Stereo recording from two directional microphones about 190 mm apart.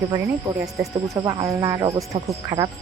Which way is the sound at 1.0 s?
15° right (ahead or behind).